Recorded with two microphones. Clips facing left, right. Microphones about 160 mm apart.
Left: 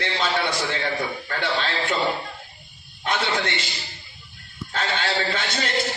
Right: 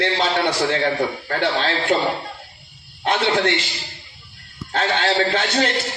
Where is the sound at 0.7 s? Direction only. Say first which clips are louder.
Right 6 dB; 45° right (ahead or behind).